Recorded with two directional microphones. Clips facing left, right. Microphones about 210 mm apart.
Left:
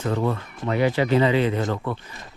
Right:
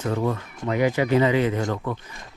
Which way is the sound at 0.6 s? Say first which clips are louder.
Even; 15° right (ahead or behind).